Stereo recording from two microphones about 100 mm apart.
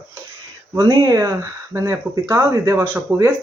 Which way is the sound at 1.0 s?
30° right (ahead or behind).